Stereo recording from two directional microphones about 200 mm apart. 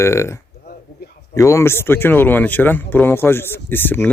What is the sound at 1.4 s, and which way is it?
Speech, 15° left (ahead or behind).